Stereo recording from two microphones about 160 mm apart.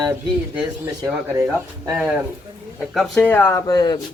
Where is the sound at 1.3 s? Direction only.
15° right (ahead or behind).